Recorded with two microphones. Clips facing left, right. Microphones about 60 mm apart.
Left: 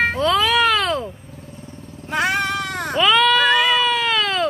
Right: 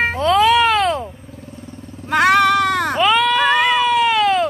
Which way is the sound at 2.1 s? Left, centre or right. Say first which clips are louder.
Right 8 dB; right.